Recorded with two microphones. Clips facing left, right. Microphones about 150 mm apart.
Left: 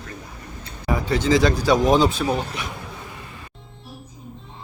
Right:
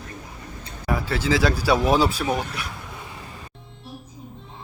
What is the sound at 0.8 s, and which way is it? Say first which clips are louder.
Speech: left 3 dB; 5° right (ahead or behind).